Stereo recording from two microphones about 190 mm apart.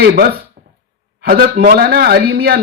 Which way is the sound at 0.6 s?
50° right (ahead or behind).